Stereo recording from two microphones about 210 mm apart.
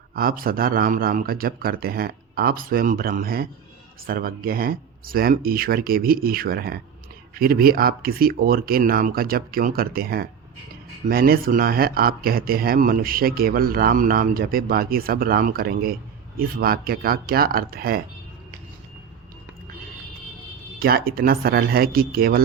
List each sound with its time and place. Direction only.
0.1 s speech: 45° right (ahead or behind)
20.7 s speech: 45° right (ahead or behind)